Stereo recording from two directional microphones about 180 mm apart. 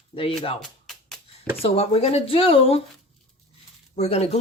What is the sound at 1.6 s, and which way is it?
Speech, 35° left (ahead or behind).